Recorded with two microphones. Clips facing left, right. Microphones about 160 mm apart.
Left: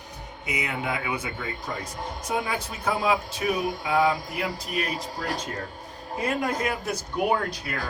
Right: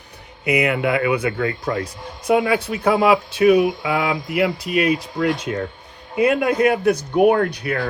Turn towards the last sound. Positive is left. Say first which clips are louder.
# right 8 dB
turn(degrees=-60)  # may be behind; listen again after turning